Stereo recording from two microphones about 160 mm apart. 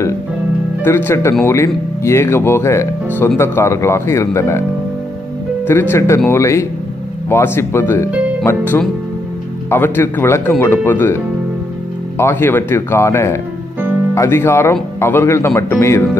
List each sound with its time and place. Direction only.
0.8 s speech: 15° left (ahead or behind)
5.7 s speech: 15° left (ahead or behind)
12.2 s speech: 15° left (ahead or behind)